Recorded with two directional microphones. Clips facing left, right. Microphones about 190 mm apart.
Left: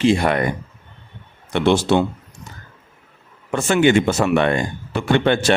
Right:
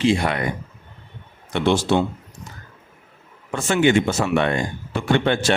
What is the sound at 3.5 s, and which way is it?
Speech, 65° left (ahead or behind).